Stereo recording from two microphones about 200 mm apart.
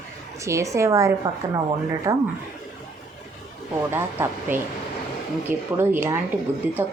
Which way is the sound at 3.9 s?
10° right (ahead or behind).